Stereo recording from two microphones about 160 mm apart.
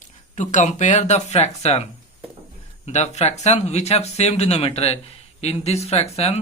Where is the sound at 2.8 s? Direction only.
45° left (ahead or behind).